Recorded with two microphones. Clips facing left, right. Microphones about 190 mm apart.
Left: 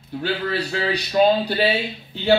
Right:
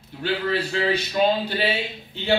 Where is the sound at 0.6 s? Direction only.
40° left (ahead or behind).